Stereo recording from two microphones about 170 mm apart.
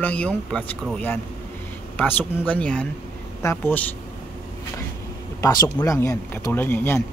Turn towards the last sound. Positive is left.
turn(degrees=15)  # may be behind; listen again after turning